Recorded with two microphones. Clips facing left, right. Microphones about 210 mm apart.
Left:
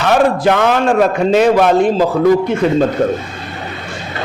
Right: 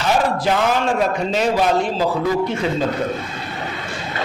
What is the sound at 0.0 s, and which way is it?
A man's voice, 65° left (ahead or behind).